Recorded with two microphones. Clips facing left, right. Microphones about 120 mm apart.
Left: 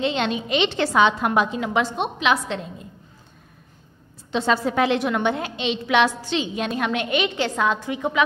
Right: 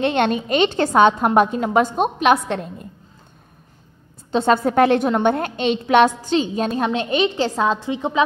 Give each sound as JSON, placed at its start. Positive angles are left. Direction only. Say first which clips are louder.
{"t": 0.0, "sound": "a woman's voice", "louder": "right 5 dB", "side_deg": -55}
{"t": 4.3, "sound": "a woman's voice", "louder": "right 4 dB", "side_deg": -45}